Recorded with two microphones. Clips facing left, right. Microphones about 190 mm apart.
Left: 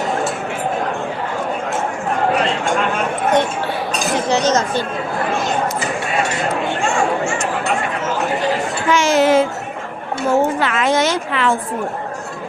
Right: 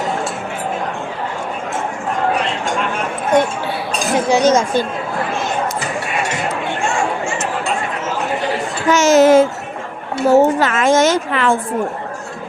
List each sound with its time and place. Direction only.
4.3 s speech: 10° right (ahead or behind)
8.9 s a sound: 45° right (ahead or behind)
10.2 s a woman's voice: 45° right (ahead or behind)